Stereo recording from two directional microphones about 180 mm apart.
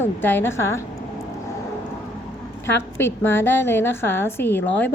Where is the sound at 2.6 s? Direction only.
15° left (ahead or behind).